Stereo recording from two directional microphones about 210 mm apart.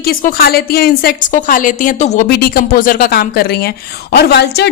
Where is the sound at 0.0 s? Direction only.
45° left (ahead or behind).